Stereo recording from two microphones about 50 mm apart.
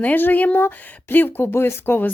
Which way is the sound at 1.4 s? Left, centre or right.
Left.